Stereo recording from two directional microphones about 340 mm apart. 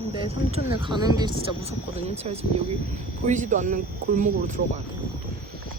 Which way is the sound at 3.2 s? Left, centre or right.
Right.